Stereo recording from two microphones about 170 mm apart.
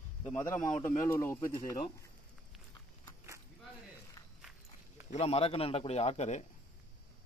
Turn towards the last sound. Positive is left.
turn(degrees=40)  # may be behind; listen again after turning